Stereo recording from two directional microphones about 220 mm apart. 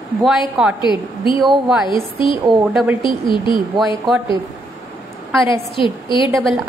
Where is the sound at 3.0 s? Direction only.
20° left (ahead or behind).